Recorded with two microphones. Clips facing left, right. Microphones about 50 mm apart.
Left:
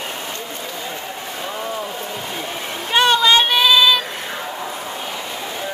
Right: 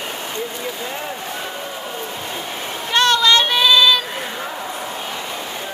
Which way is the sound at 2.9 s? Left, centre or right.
Centre.